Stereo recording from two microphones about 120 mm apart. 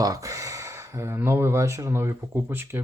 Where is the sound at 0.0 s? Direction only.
30° right (ahead or behind).